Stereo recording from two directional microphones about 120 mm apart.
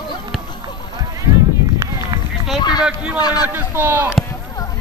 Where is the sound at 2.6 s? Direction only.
35° left (ahead or behind).